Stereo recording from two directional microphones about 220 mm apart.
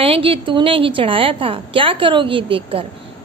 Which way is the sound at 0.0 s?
25° right (ahead or behind).